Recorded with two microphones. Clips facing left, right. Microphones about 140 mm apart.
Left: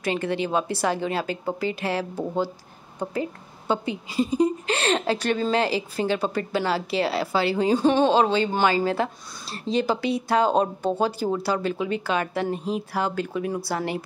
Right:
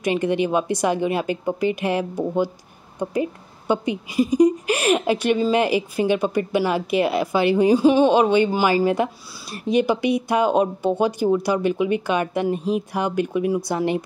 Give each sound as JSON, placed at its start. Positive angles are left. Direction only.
{"t": 0.0, "sound": "a woman's voice", "side_deg": -15}